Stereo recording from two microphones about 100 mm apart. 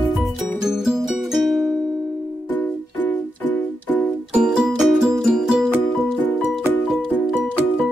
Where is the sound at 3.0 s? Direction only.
15° left (ahead or behind).